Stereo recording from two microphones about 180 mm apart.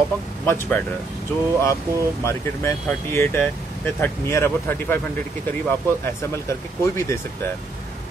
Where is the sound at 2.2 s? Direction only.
15° left (ahead or behind).